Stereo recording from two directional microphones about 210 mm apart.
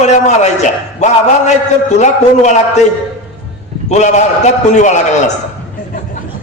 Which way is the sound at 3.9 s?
35° left (ahead or behind).